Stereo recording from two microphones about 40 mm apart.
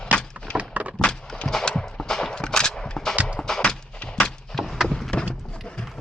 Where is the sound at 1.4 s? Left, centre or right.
Centre.